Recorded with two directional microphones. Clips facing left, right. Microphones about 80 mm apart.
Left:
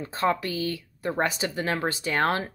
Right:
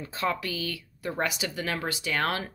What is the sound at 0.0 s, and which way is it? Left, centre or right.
A woman's voice, left.